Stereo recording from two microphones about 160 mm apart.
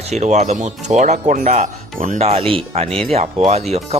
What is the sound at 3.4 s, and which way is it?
Speech, 40° right (ahead or behind).